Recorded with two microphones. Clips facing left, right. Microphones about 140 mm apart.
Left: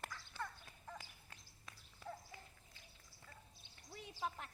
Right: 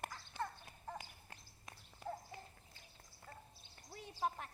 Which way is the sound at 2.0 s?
40° right (ahead or behind).